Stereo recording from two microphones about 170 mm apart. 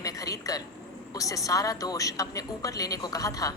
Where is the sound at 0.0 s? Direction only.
20° left (ahead or behind).